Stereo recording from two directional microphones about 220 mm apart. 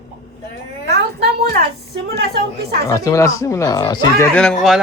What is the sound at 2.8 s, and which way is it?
Speech, 15° left (ahead or behind).